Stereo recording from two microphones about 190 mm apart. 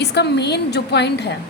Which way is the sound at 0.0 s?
60° left (ahead or behind).